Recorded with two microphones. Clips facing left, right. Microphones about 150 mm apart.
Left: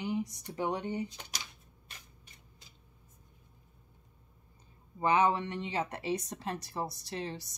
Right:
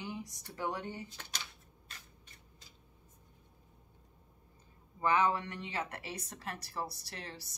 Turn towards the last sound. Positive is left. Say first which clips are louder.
# left 8 dB
turn(degrees=20)  # may be behind; listen again after turning